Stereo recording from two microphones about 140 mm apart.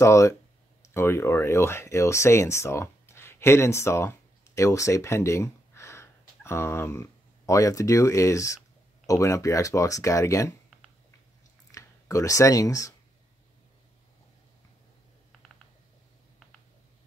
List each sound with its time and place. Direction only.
0.0 s speech: 20° left (ahead or behind)
11.7 s speech: 25° left (ahead or behind)